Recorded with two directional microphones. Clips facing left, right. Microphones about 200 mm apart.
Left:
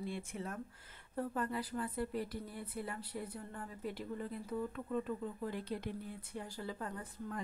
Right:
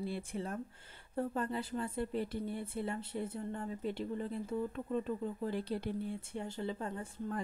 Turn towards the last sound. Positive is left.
turn(degrees=-25)  # may be behind; listen again after turning